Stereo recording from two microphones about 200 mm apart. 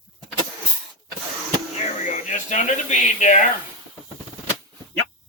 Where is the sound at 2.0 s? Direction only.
40° left (ahead or behind).